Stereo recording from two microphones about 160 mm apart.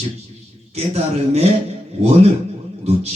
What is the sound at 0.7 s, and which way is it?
Speech, 40° right (ahead or behind).